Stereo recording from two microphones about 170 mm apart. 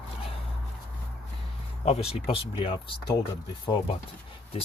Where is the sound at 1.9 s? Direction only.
35° left (ahead or behind).